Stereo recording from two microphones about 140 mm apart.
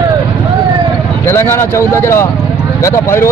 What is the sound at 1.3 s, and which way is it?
Speech, 15° left (ahead or behind).